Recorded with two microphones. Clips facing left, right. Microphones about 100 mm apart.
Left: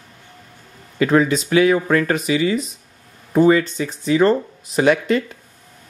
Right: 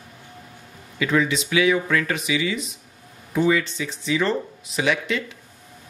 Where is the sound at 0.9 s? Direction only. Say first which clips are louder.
Left 6 dB; 45° left (ahead or behind).